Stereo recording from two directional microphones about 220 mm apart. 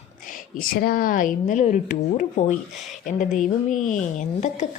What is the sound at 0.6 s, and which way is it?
A woman's voice, 40° left (ahead or behind).